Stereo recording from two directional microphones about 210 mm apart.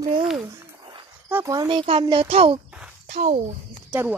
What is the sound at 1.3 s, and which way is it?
A child's voice, 15° right (ahead or behind).